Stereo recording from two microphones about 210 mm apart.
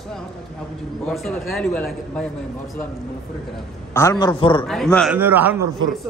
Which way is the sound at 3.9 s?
15° left (ahead or behind).